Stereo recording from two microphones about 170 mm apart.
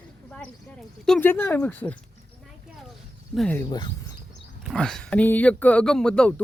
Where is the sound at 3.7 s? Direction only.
25° left (ahead or behind).